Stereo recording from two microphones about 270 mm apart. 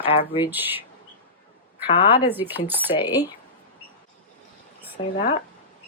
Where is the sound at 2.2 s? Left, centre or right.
Centre.